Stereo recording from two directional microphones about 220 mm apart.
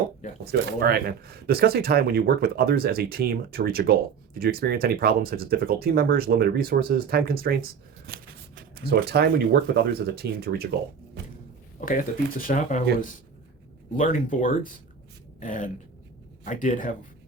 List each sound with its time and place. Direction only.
0.5 s speech: 45° right (ahead or behind)
11.9 s speech: 40° left (ahead or behind)